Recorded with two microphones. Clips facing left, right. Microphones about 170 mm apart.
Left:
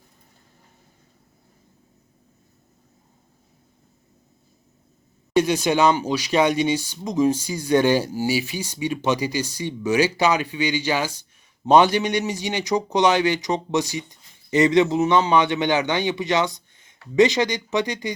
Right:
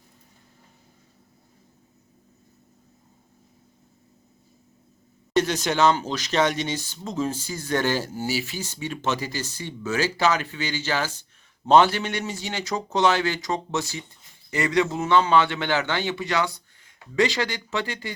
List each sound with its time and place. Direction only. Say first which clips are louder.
5.3 s speech: left 4 dB; 10° left (ahead or behind)